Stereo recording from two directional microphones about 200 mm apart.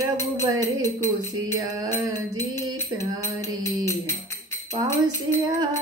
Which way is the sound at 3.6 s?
15° left (ahead or behind).